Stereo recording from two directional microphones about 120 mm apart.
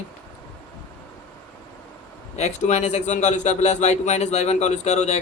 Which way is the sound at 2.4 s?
75° left (ahead or behind).